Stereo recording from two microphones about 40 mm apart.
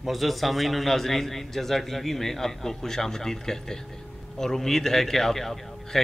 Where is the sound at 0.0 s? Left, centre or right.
Centre.